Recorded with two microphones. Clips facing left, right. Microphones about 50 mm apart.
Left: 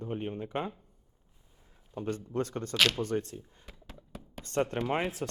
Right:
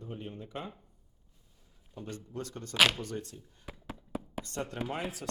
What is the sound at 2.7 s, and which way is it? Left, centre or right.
Speech, centre.